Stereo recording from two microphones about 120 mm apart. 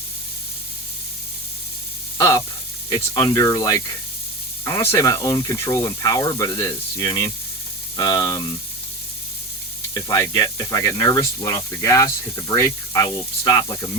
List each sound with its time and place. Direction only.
2.1 s speech: 25° left (ahead or behind)
9.9 s speech: 30° left (ahead or behind)